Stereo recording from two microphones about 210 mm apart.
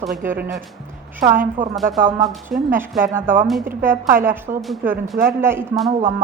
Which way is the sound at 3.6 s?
45° right (ahead or behind).